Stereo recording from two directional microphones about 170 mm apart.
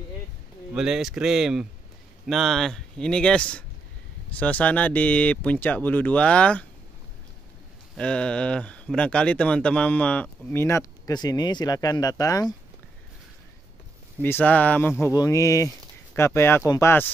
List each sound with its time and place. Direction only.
0.7 s speech: 5° right (ahead or behind)
7.9 s speech: 5° left (ahead or behind); by 12.5 s 20° left (ahead or behind)
14.2 s speech: 10° left (ahead or behind)